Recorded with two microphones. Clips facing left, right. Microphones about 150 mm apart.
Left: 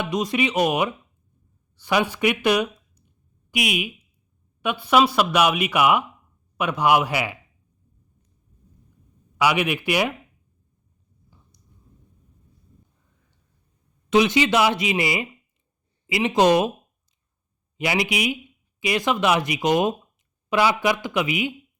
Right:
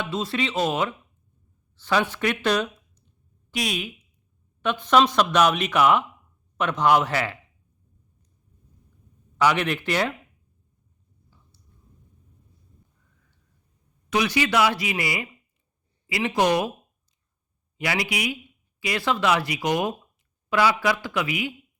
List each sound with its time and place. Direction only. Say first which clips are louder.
0.0 s speech: left 4 dB; 15° left (ahead or behind)
9.4 s speech: left 1 dB; 10° left (ahead or behind)
14.1 s speech: left 5 dB; 20° left (ahead or behind)
17.7 s speech: left 3 dB; 20° left (ahead or behind)